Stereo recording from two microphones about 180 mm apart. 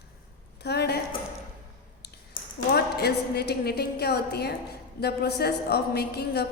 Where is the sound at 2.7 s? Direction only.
65° left (ahead or behind).